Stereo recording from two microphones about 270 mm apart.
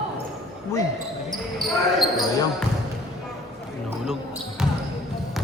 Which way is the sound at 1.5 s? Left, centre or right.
Centre.